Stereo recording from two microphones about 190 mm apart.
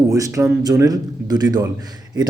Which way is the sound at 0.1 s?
15° right (ahead or behind).